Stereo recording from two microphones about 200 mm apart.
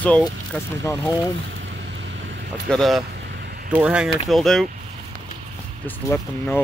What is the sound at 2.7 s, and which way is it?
Speech, centre (ahead or behind).